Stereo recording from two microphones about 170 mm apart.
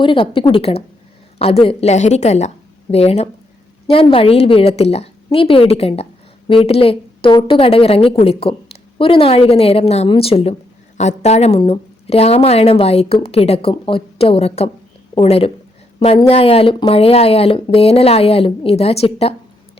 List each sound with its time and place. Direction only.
0.0 s a woman's voice: 30° left (ahead or behind)